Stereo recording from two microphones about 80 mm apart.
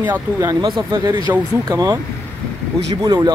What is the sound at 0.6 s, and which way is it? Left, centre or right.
Speech, right.